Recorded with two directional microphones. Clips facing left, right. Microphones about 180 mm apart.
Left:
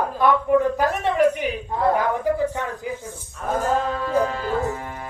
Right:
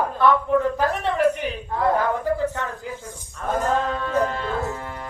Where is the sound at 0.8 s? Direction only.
15° left (ahead or behind).